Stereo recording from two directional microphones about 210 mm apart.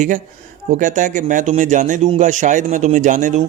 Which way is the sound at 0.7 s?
40° right (ahead or behind).